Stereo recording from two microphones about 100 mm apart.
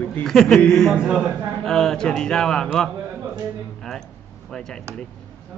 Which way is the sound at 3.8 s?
5° left (ahead or behind).